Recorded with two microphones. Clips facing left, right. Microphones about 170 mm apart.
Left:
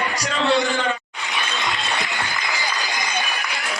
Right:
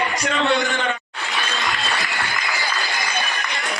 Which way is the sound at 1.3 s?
20° left (ahead or behind).